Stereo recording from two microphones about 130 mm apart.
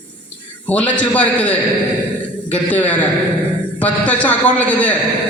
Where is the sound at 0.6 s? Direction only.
10° left (ahead or behind).